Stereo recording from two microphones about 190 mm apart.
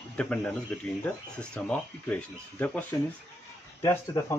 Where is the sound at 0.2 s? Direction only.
5° left (ahead or behind).